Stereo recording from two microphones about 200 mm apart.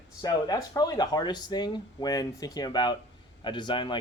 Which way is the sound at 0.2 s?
20° left (ahead or behind).